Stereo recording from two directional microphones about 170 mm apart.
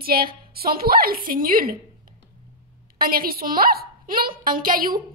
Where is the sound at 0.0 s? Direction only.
60° right (ahead or behind).